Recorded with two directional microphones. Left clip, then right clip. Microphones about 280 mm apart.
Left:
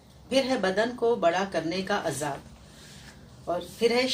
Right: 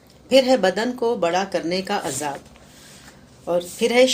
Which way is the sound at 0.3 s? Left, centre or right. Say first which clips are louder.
Right 9 dB; right.